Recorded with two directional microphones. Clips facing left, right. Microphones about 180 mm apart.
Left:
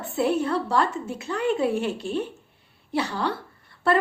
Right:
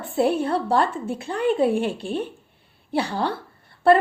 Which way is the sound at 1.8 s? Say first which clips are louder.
Right 1 dB; 60° right (ahead or behind).